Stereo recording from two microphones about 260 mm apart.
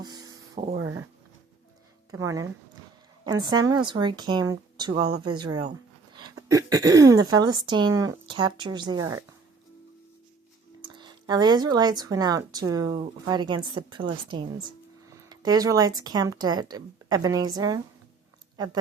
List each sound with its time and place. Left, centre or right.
0.0 s a sound: centre
2.0 s speech: centre
10.8 s a woman's voice: centre